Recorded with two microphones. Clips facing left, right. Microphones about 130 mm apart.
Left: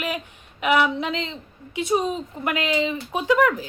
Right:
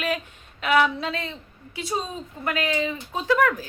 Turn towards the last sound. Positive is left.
turn(degrees=15)  # may be behind; listen again after turning